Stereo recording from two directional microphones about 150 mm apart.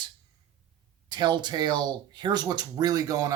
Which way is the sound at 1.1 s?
30° right (ahead or behind).